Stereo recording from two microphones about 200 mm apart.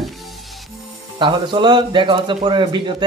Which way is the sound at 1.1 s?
25° right (ahead or behind).